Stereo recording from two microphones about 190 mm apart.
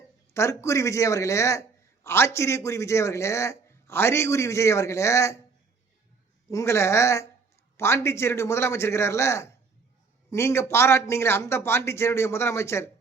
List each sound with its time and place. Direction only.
0.3 s a man's voice: 15° left (ahead or behind)
6.5 s a man's voice: 15° left (ahead or behind)